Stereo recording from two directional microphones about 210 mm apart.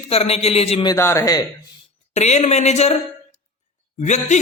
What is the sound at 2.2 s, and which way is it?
Speech, 30° left (ahead or behind).